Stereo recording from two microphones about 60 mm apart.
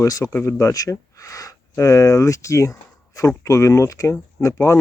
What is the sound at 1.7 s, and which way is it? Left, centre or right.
Speech, left.